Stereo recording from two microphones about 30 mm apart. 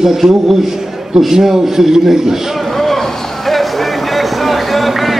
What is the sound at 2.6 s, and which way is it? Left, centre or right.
Vehicle, centre.